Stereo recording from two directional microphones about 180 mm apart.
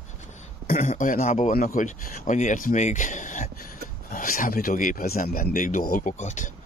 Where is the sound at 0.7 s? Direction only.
45° left (ahead or behind).